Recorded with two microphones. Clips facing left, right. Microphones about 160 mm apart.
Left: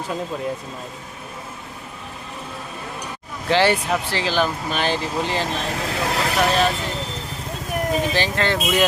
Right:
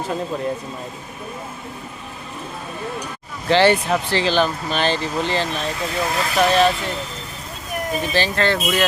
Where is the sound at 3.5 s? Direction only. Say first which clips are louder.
Right 3 dB; 10° left (ahead or behind).